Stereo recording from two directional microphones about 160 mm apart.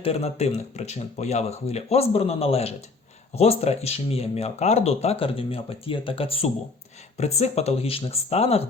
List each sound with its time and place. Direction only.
0.0 s speech: 40° left (ahead or behind)